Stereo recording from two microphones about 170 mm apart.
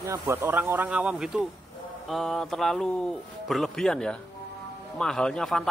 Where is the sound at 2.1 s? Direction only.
Centre (ahead or behind).